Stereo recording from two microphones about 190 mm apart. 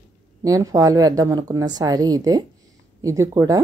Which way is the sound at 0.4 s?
15° right (ahead or behind).